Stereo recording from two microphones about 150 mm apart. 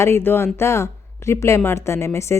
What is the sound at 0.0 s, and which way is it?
A woman's voice, 15° left (ahead or behind).